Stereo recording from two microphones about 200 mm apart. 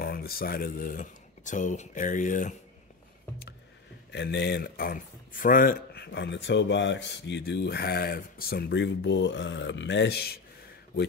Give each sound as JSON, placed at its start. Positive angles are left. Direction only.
{"t": 0.0, "sound": "speech", "side_deg": 50}
{"t": 4.1, "sound": "speech", "side_deg": 60}